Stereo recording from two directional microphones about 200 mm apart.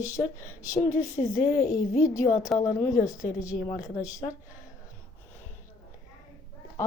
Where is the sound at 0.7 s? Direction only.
40° left (ahead or behind).